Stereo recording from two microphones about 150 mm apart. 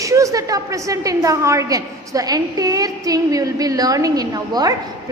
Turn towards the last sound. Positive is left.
turn(degrees=-25)  # may be behind; listen again after turning